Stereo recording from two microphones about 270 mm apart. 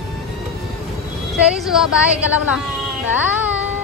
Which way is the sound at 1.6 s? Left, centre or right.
Centre.